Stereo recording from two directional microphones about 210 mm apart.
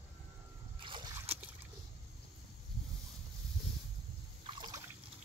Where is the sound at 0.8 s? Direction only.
25° right (ahead or behind).